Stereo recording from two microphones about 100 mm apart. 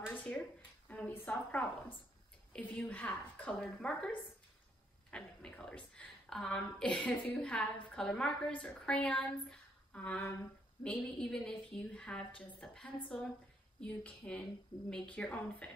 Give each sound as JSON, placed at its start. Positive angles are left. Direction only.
{"t": 0.8, "sound": "a woman's voice", "side_deg": 15}